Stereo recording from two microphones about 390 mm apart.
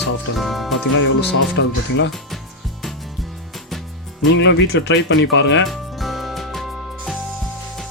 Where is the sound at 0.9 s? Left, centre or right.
Left.